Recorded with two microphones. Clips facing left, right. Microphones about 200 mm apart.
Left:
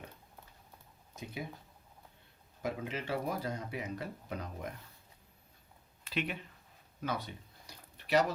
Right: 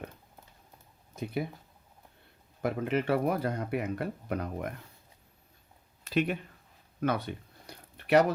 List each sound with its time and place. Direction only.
1.1 s speech: 60° right (ahead or behind)
2.6 s speech: 60° right (ahead or behind)
6.1 s speech: 45° right (ahead or behind)
7.0 s a sound: 60° right (ahead or behind)